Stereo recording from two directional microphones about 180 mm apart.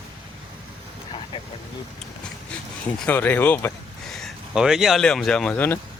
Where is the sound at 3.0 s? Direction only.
10° left (ahead or behind).